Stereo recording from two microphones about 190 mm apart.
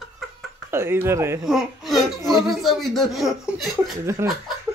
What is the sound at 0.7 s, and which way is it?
Speech, 10° right (ahead or behind).